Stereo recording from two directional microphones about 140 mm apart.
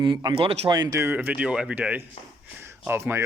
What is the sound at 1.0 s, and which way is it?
Speech, 15° right (ahead or behind).